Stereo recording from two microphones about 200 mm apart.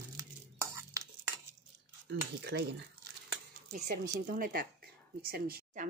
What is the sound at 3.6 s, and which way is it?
Speech, 40° right (ahead or behind).